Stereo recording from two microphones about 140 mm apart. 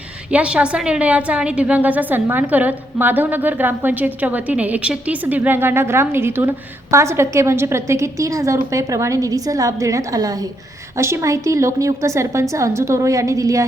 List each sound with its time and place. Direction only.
0.3 s a woman's voice: 10° right (ahead or behind)